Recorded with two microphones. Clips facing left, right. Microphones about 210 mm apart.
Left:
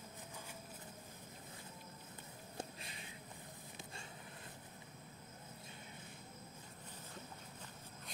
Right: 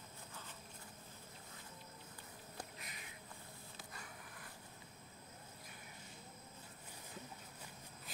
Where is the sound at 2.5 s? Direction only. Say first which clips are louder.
Left 5 dB; 25° left (ahead or behind).